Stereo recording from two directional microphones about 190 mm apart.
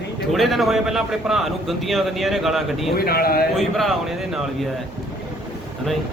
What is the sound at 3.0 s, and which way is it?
Speech, 55° left (ahead or behind).